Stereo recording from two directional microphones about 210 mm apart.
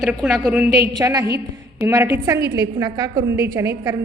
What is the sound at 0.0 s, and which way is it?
Speech, centre (ahead or behind).